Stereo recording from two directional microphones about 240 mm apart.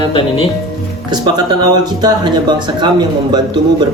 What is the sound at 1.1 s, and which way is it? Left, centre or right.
Speech, centre.